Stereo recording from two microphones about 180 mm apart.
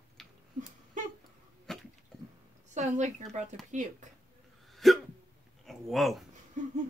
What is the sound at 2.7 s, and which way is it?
A woman's voice, 40° right (ahead or behind).